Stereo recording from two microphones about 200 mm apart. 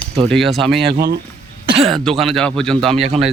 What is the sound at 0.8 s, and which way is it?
Speech, 55° right (ahead or behind).